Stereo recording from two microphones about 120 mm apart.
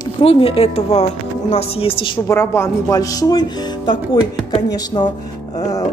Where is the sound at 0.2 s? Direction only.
50° left (ahead or behind).